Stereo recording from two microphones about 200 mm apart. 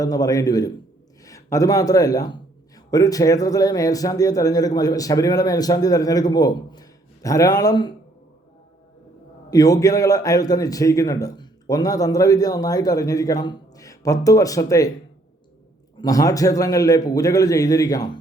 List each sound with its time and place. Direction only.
0.0 s a man's voice: 20° left (ahead or behind)
9.5 s a man's voice: 20° left (ahead or behind)
16.0 s a man's voice: 15° left (ahead or behind)